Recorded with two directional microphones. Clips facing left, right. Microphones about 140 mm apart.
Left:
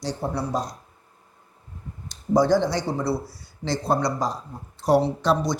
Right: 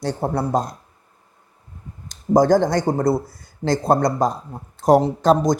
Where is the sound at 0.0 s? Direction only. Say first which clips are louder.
Right 5 dB; 50° right (ahead or behind).